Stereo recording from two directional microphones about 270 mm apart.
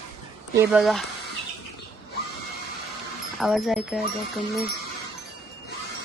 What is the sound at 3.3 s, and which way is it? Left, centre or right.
Speech, centre.